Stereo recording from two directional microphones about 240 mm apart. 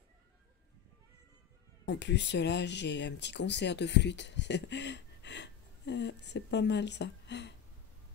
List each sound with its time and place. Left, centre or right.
1.9 s speech: left